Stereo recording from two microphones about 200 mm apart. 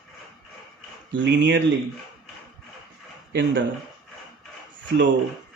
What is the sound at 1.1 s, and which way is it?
Speech, 65° right (ahead or behind).